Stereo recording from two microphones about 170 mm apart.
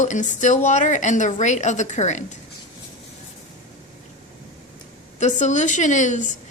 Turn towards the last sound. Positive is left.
turn(degrees=45)  # may be behind; listen again after turning